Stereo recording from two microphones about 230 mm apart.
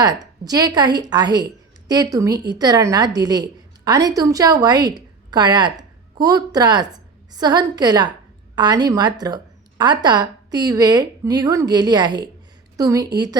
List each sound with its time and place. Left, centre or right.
0.0 s a woman's voice: centre